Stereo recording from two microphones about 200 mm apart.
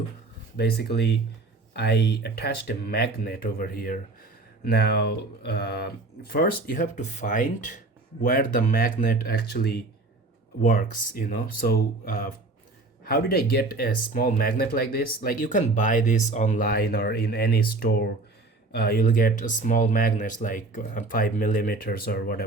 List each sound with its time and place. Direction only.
0.5 s speech: 55° left (ahead or behind)